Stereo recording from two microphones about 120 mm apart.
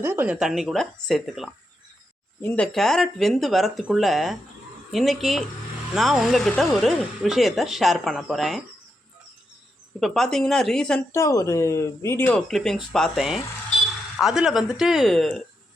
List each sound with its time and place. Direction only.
0.0 s speech: 15° right (ahead or behind)
0.3 s speech: 5° right (ahead or behind)
2.7 s speech: 5° left (ahead or behind)
10.0 s speech: 5° left (ahead or behind)
11.1 s speech: 25° left (ahead or behind)
12.5 s speech: centre (ahead or behind)